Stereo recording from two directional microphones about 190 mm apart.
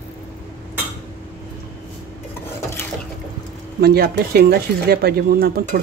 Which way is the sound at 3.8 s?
55° right (ahead or behind).